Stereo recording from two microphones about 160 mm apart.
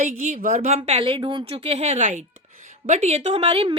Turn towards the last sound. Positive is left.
turn(degrees=-35)  # may be behind; listen again after turning